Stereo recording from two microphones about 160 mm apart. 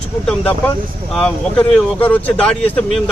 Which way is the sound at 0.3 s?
10° left (ahead or behind).